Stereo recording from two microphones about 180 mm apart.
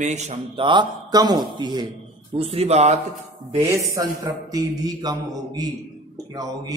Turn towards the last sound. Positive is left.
turn(degrees=-20)  # may be behind; listen again after turning